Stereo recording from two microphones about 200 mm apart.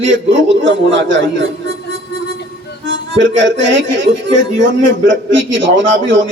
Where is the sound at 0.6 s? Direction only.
65° right (ahead or behind).